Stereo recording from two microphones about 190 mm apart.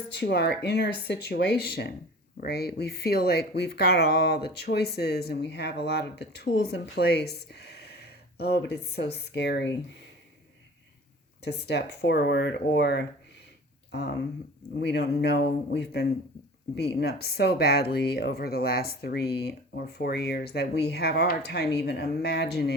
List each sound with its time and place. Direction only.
0.2 s speech: 60° left (ahead or behind)
11.4 s speech: 60° left (ahead or behind)